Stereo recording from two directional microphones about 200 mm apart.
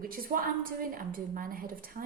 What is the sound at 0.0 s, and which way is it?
A woman's voice, 45° right (ahead or behind).